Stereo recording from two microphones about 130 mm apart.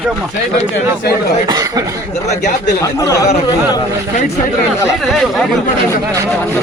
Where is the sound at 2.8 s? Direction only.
25° left (ahead or behind).